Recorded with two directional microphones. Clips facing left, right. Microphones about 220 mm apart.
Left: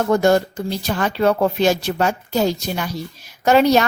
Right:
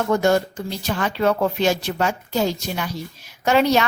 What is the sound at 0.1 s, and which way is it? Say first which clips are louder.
A woman's voice: left 3 dB; 35° left (ahead or behind).